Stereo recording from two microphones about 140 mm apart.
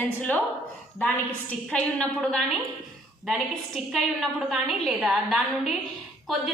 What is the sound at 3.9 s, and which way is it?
A woman's voice, centre (ahead or behind).